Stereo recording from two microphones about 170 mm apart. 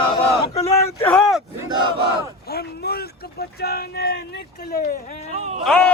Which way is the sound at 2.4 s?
65° left (ahead or behind).